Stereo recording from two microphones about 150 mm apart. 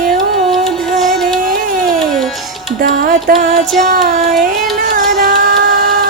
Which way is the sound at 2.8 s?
70° right (ahead or behind).